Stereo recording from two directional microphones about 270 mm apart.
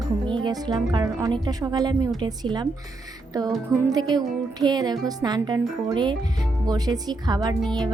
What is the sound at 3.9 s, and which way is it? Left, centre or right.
Speech, centre.